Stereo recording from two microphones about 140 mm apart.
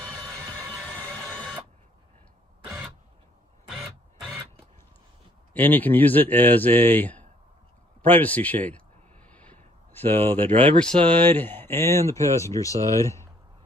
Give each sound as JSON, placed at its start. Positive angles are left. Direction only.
{"t": 0.6, "sound": "music", "side_deg": -15}
{"t": 1.0, "sound": "printer", "side_deg": 5}
{"t": 2.6, "sound": "a sound", "side_deg": -5}
{"t": 5.5, "sound": "a man's voice", "side_deg": 15}
{"t": 8.0, "sound": "a sound", "side_deg": 10}
{"t": 10.8, "sound": "speech", "side_deg": 5}